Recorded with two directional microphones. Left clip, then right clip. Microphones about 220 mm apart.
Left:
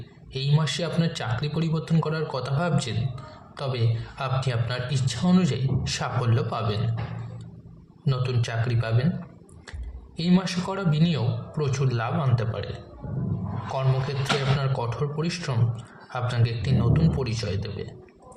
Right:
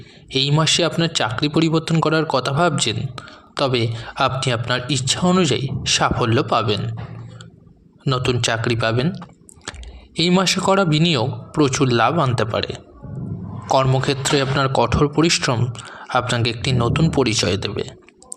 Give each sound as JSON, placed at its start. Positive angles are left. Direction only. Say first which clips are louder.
{"t": 0.3, "sound": "a man's voice", "louder": "right 11 dB", "side_deg": -45}
{"t": 8.0, "sound": "a man's voice", "louder": "right 11 dB", "side_deg": -40}
{"t": 10.2, "sound": "a man's voice", "louder": "right 10 dB", "side_deg": -40}
{"t": 13.7, "sound": "a man's voice", "louder": "right 12 dB", "side_deg": -45}